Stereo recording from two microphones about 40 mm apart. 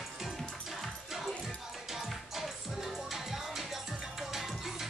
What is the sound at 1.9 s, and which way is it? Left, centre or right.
Music, centre.